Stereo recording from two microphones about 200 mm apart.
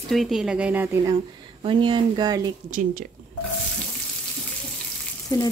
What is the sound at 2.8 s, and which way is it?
Speech, 40° right (ahead or behind).